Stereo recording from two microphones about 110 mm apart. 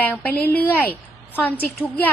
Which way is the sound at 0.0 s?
15° left (ahead or behind).